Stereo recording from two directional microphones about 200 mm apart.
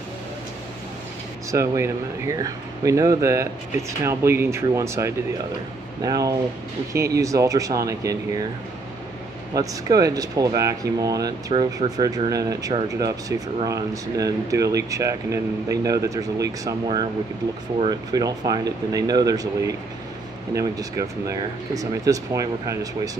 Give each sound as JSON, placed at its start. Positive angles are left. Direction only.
{"t": 1.5, "sound": "speech", "side_deg": -15}
{"t": 9.5, "sound": "speech", "side_deg": -20}